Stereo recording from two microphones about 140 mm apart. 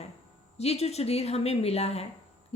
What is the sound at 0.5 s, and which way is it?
Speech, 50° left (ahead or behind).